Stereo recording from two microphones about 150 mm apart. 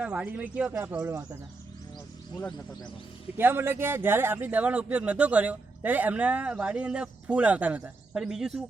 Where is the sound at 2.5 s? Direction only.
25° left (ahead or behind).